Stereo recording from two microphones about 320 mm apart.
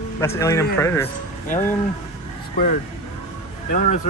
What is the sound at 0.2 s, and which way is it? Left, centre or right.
Speech, centre.